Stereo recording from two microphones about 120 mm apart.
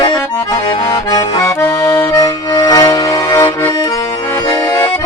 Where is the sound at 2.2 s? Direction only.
30° left (ahead or behind).